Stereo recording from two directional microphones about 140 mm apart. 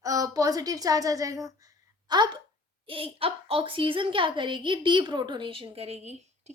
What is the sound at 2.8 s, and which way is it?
A woman's voice, 40° right (ahead or behind).